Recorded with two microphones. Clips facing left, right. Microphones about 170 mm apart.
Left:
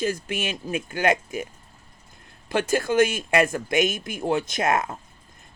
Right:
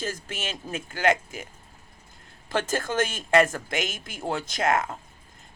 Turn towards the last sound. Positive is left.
turn(degrees=20)  # may be behind; listen again after turning